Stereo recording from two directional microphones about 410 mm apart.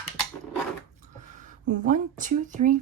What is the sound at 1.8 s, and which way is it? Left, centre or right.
Speech, centre.